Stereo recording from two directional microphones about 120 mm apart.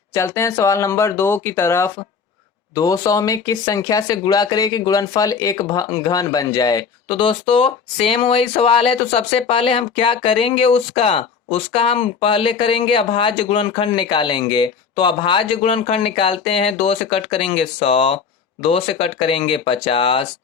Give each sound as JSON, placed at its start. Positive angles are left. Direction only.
{"t": 0.1, "sound": "speech", "side_deg": 25}